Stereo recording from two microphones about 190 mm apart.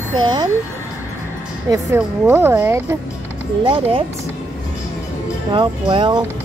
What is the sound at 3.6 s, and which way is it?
Speech, 25° right (ahead or behind).